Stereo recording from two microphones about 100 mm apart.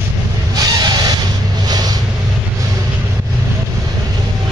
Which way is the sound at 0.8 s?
45° right (ahead or behind).